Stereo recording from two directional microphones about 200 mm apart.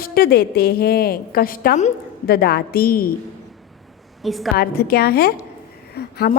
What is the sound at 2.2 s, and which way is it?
Speech, 50° left (ahead or behind).